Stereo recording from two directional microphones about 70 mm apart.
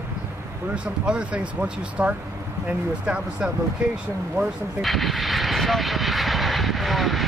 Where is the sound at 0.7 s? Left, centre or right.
Centre.